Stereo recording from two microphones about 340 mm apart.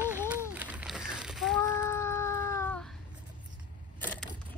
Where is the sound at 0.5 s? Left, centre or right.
Centre.